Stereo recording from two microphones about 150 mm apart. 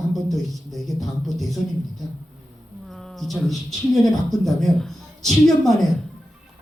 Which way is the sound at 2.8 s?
Centre (ahead or behind).